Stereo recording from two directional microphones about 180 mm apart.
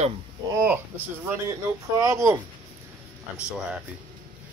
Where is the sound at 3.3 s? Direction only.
5° right (ahead or behind).